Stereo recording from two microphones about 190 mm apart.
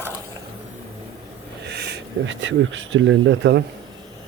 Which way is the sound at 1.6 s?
60° right (ahead or behind).